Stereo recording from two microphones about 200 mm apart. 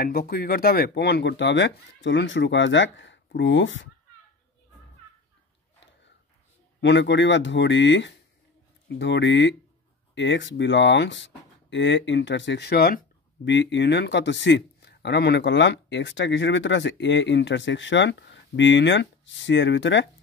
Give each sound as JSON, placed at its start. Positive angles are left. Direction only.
{"t": 0.0, "sound": "a man's voice", "side_deg": 50}
{"t": 6.8, "sound": "a man's voice", "side_deg": 65}
{"t": 13.5, "sound": "a man's voice", "side_deg": 60}